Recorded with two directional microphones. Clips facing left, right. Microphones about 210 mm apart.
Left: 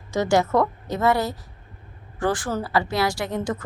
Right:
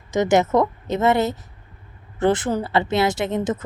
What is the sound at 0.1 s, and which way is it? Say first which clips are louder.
A woman's voice: right 3 dB; 20° right (ahead or behind).